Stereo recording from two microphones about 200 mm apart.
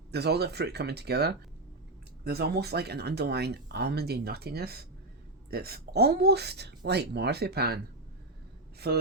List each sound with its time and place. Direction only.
0.1 s speech: 55° right (ahead or behind)
8.8 s speech: 55° right (ahead or behind)